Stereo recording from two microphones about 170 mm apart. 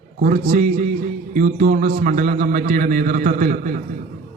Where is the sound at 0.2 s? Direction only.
50° right (ahead or behind).